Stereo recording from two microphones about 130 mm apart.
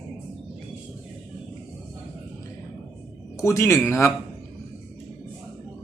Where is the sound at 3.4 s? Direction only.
20° left (ahead or behind).